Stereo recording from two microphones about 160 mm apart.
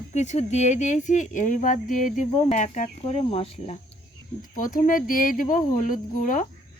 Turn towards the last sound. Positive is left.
turn(degrees=55)  # may be behind; listen again after turning